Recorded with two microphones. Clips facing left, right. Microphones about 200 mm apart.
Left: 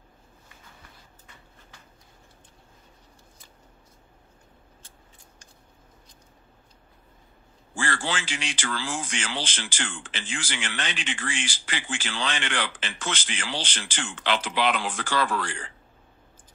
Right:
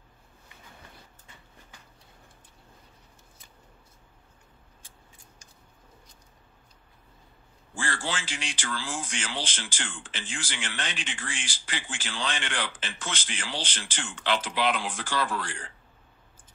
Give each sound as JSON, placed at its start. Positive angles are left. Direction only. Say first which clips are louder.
{"t": 7.7, "sound": "a man's voice", "louder": "left 3 dB", "side_deg": 75}